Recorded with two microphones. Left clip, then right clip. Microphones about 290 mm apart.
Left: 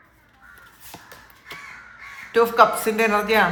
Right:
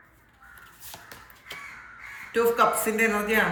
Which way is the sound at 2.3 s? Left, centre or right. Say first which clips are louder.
Left 6 dB; centre.